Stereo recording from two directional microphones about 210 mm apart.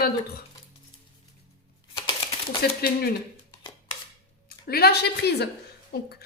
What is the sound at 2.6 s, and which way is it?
Speech, 50° left (ahead or behind).